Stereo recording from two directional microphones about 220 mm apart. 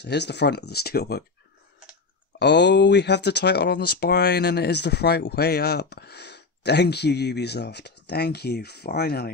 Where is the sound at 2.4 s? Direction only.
50° left (ahead or behind).